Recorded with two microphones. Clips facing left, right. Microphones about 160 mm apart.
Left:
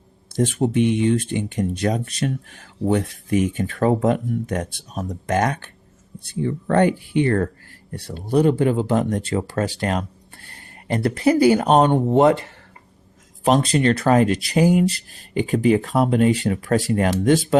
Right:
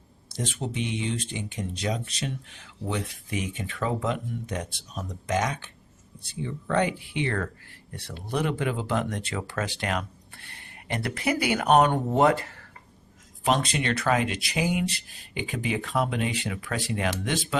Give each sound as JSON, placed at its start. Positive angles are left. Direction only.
{"t": 0.3, "sound": "speech", "side_deg": 50}
{"t": 13.4, "sound": "speech", "side_deg": 35}